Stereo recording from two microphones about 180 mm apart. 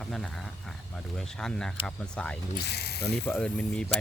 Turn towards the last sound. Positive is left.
turn(degrees=5)  # may be behind; listen again after turning